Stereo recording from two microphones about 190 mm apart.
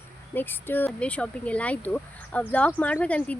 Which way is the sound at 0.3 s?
10° left (ahead or behind).